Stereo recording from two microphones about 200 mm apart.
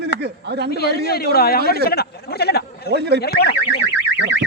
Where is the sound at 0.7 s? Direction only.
50° left (ahead or behind).